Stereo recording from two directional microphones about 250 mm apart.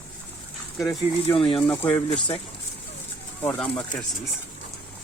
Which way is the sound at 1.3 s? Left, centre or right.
Left.